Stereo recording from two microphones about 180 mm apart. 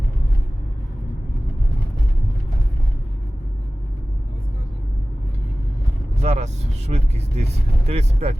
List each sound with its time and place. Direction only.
6.2 s speech: 40° right (ahead or behind)